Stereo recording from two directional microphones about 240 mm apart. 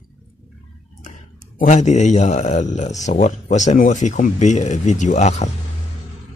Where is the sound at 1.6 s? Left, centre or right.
Left.